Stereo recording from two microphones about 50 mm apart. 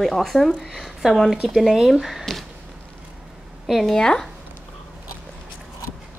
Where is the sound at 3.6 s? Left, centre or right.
Centre.